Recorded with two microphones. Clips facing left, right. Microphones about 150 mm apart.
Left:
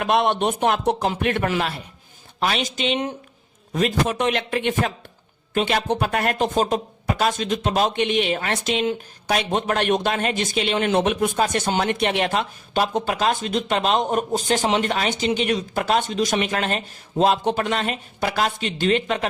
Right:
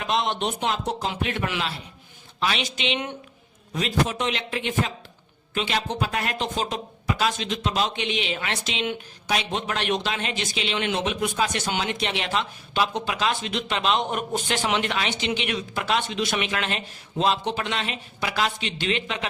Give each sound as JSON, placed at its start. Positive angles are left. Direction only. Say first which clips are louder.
{"t": 0.0, "sound": "a man's voice", "louder": "left 6 dB", "side_deg": 55}
{"t": 3.7, "sound": "a man's voice", "louder": "left 4 dB", "side_deg": 50}